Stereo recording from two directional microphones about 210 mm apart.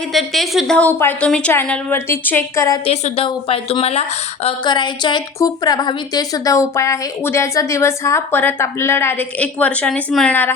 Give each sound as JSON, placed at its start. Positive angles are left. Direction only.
{"t": 0.1, "sound": "a woman's voice", "side_deg": 0}
{"t": 2.8, "sound": "a woman's voice", "side_deg": 30}